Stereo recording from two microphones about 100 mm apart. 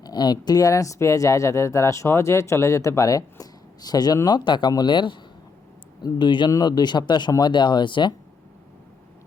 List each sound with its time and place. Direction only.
0.0 s speech: 45° left (ahead or behind)